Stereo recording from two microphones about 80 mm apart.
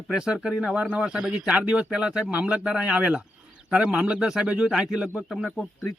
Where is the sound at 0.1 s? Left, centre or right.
Centre.